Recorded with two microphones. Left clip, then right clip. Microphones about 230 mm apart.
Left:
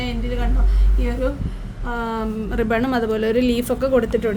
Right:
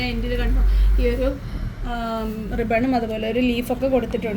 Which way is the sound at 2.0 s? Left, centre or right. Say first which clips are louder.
Left 1 dB; left.